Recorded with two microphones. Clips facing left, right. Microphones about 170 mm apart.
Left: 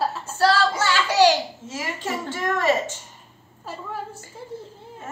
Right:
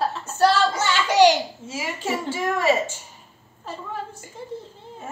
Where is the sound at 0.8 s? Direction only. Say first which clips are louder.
Right 2 dB; 15° right (ahead or behind).